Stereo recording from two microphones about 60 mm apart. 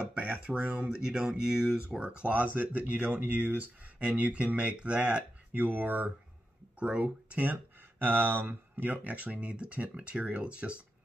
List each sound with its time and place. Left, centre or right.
0.0 s a sound: centre
0.6 s speech: right
0.8 s speech: centre
5.6 s speech: right